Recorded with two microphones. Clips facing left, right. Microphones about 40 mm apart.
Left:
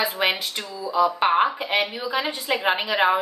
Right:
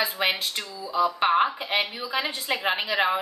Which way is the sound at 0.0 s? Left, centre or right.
Centre.